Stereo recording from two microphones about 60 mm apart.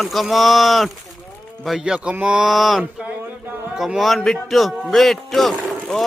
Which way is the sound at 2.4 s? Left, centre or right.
Centre.